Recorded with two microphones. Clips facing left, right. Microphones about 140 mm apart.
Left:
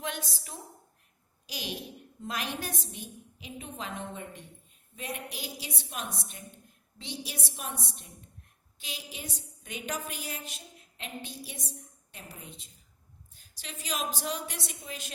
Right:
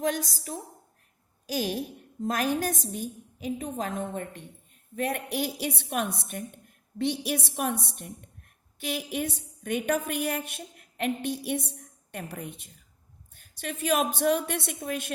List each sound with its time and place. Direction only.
0.0 s a woman's voice: 40° right (ahead or behind); by 15.1 s 60° right (ahead or behind)